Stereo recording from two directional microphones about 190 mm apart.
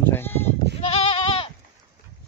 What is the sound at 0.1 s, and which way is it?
Goat, 10° left (ahead or behind).